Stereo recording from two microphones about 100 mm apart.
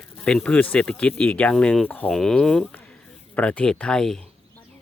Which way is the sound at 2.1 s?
5° left (ahead or behind).